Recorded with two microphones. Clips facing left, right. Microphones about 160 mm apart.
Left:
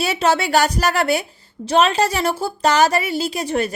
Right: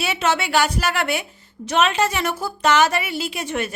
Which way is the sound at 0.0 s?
35° left (ahead or behind).